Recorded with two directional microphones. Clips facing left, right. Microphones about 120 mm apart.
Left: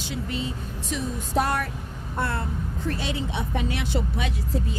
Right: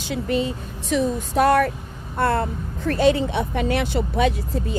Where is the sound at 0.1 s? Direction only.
60° right (ahead or behind).